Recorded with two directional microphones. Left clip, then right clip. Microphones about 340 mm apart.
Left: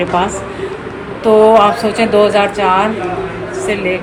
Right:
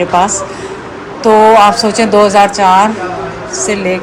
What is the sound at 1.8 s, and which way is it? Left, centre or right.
Speech, right.